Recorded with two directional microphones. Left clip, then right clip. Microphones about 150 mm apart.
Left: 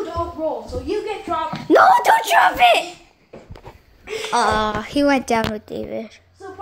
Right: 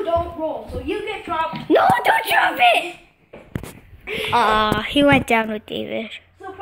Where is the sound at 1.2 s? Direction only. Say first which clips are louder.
Even; 20° left (ahead or behind).